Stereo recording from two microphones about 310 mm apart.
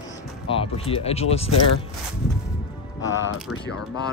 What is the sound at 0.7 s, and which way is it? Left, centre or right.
Speech, centre.